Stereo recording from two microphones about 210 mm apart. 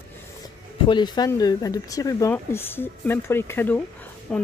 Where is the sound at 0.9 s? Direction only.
20° left (ahead or behind).